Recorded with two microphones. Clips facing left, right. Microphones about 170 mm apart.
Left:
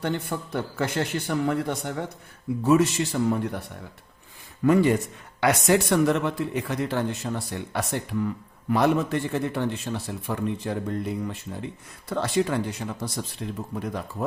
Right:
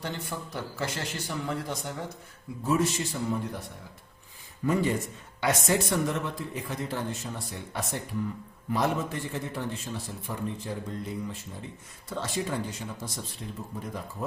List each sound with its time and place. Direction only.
0.0 s speech: 60° left (ahead or behind)
2.6 s a man's voice: 75° left (ahead or behind)
4.6 s a man's voice: 75° left (ahead or behind)
13.4 s speech: 90° left
13.7 s a man's voice: 75° left (ahead or behind)